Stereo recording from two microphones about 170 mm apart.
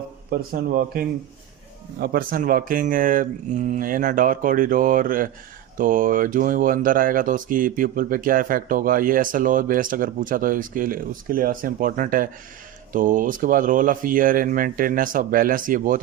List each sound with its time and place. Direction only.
0.3 s speech: 60° right (ahead or behind)